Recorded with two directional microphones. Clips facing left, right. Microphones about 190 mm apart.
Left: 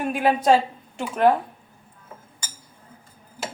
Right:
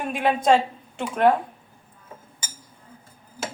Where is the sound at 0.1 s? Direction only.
5° left (ahead or behind).